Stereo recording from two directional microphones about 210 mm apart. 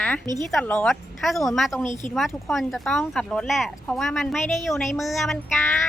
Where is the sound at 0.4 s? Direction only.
5° left (ahead or behind).